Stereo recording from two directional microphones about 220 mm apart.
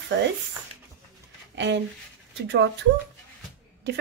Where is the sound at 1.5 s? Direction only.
50° right (ahead or behind).